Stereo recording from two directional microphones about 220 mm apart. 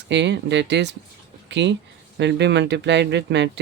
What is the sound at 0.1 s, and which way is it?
Speech, 50° right (ahead or behind).